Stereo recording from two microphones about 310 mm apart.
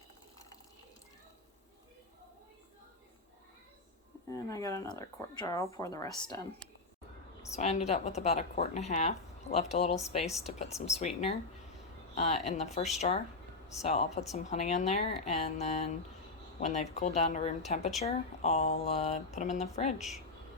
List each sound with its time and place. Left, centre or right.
4.3 s speech: centre
7.5 s a woman's voice: left
12.1 s a woman's voice: left
20.0 s speech: centre